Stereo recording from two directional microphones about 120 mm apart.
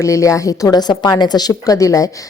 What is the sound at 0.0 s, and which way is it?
A woman's voice, 25° left (ahead or behind).